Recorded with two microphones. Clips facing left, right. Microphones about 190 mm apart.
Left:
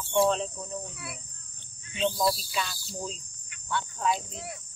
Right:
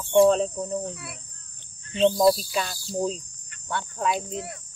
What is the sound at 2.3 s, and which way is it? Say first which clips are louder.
Speech: right 5 dB; 50° right (ahead or behind).